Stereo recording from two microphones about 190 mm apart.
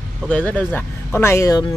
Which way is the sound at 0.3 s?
5° left (ahead or behind).